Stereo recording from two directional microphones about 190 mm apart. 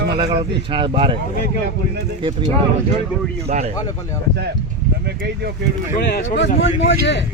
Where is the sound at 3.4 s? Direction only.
35° right (ahead or behind).